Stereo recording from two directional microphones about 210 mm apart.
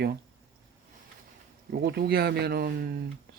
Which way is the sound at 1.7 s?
50° right (ahead or behind).